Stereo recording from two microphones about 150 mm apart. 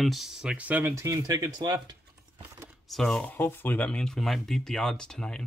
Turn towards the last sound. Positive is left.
turn(degrees=5)  # may be behind; listen again after turning